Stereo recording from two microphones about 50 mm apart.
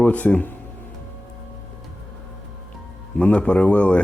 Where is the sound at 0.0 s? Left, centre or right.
Left.